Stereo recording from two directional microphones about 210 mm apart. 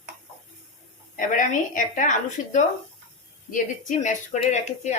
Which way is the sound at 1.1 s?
40° left (ahead or behind).